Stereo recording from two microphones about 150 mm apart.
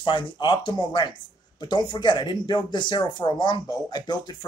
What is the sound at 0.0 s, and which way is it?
Speech, 35° left (ahead or behind).